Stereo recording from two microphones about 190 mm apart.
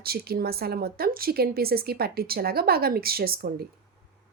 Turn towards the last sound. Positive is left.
turn(degrees=-55)  # may be behind; listen again after turning